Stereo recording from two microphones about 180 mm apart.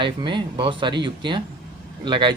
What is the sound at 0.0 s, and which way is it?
Speech, 25° right (ahead or behind).